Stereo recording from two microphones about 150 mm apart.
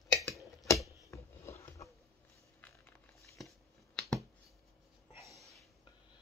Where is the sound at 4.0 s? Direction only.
5° left (ahead or behind).